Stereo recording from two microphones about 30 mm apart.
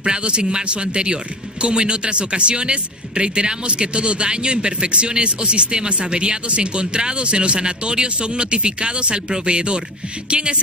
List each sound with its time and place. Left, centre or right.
0.0 s speech: right